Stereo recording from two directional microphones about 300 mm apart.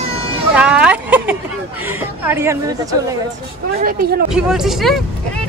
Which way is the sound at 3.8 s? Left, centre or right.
Right.